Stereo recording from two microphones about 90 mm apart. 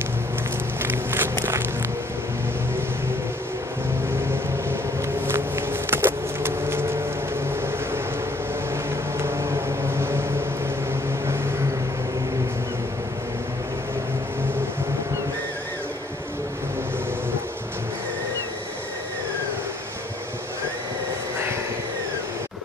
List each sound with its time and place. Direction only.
0.8 s a sound: 25° right (ahead or behind)
1.3 s walk: 30° right (ahead or behind)
5.2 s vehicle: 25° right (ahead or behind)
9.2 s vehicle: 30° right (ahead or behind)